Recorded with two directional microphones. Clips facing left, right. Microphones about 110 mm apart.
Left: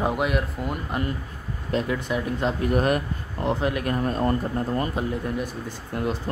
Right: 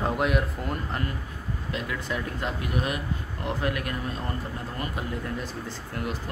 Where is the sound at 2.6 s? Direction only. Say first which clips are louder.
Left 9 dB; 50° left (ahead or behind).